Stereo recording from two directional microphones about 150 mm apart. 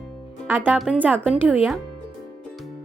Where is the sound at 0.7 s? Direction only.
5° right (ahead or behind).